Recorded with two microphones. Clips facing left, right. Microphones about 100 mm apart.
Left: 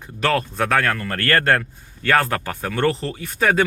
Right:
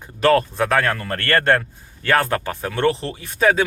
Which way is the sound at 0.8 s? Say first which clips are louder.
Even; 25° right (ahead or behind).